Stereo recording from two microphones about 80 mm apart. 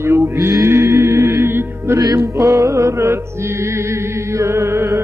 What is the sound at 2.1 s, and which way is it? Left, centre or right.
Music, right.